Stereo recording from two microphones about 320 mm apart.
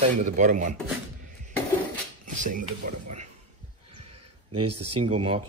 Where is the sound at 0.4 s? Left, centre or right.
Right.